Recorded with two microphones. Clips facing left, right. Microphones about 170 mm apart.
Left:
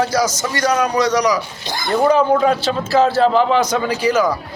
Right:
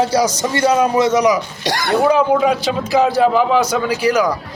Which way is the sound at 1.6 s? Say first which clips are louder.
Right 4 dB; 85° right.